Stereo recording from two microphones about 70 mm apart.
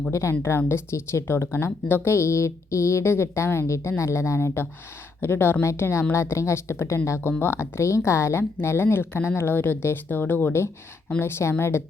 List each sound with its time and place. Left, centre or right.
0.1 s speech: left
7.2 s speech: left